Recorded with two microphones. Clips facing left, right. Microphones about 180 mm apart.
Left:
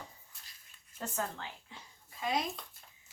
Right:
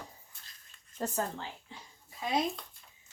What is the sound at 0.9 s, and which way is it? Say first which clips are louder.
Speech: right 4 dB; 35° right (ahead or behind).